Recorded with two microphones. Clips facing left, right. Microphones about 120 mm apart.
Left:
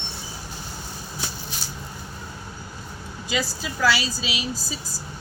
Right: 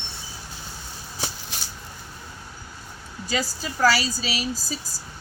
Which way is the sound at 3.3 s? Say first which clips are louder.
Even; 40° right (ahead or behind).